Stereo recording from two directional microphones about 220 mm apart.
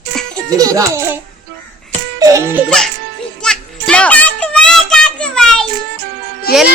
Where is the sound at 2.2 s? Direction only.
15° right (ahead or behind).